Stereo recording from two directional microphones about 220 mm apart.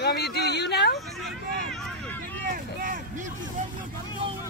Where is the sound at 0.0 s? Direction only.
50° left (ahead or behind).